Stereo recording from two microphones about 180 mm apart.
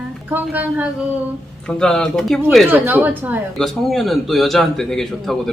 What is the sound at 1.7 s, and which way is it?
Speech, 5° left (ahead or behind).